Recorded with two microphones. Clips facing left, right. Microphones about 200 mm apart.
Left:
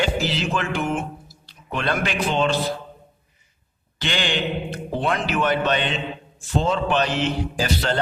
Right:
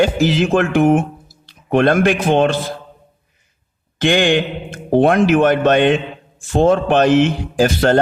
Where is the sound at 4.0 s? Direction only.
50° right (ahead or behind).